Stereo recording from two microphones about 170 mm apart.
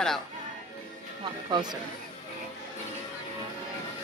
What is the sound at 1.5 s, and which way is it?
Speech, 25° right (ahead or behind).